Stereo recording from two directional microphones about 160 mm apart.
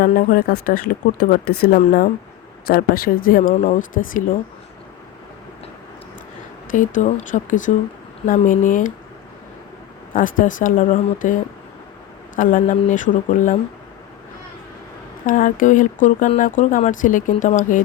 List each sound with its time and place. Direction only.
0.0 s speech: 60° left (ahead or behind)
3.5 s speech: 45° left (ahead or behind)
6.7 s speech: 55° left (ahead or behind)
10.1 s speech: 55° left (ahead or behind)
12.4 s speech: 55° left (ahead or behind)
15.3 s speech: 55° left (ahead or behind)